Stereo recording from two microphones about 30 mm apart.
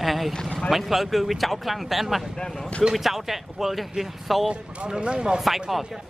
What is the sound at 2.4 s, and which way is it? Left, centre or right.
Speech, centre.